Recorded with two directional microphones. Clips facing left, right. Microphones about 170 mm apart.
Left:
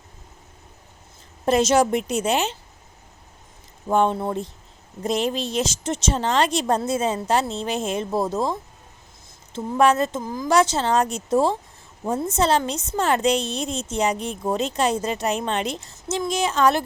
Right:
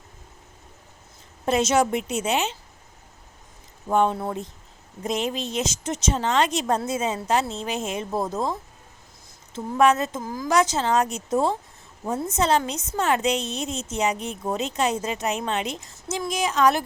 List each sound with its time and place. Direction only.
1.5 s a woman's voice: 35° left (ahead or behind)
4.1 s a woman's voice: 25° left (ahead or behind)
9.5 s a woman's voice: 35° left (ahead or behind)
12.4 s a woman's voice: 35° left (ahead or behind)